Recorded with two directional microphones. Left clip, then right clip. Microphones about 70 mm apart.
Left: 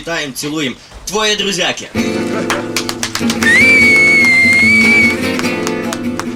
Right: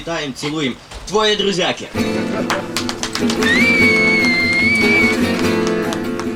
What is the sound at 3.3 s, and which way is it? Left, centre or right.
Speech, left.